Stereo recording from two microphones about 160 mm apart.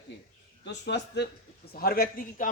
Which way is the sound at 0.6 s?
90° left.